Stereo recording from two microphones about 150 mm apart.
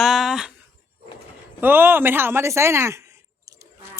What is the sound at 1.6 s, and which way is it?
Speech, 15° right (ahead or behind).